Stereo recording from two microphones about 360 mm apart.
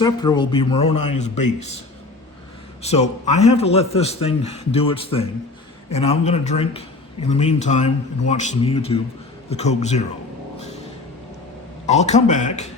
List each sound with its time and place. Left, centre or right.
0.0 s a man's voice: centre
0.9 s a man's voice: left
1.1 s speech: centre
2.8 s a man's voice: centre
11.9 s speech: centre